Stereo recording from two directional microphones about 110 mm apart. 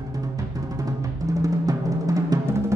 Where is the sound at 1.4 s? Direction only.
30° right (ahead or behind).